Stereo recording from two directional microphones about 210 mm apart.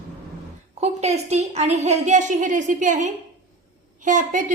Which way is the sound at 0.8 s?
30° right (ahead or behind).